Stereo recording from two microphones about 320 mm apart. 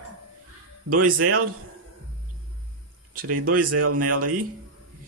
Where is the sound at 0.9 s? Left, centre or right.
Right.